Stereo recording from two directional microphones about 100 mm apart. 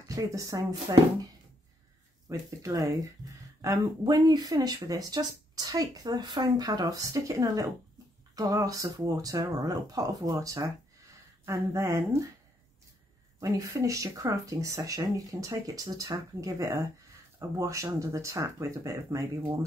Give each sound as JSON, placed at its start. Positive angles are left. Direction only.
{"t": 0.1, "sound": "speech", "side_deg": -35}
{"t": 4.0, "sound": "speech", "side_deg": -40}
{"t": 13.4, "sound": "speech", "side_deg": -35}